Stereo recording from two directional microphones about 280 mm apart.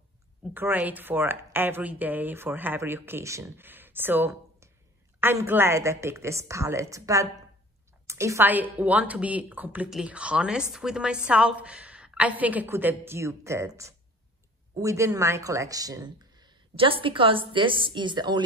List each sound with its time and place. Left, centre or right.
0.6 s a woman's voice: centre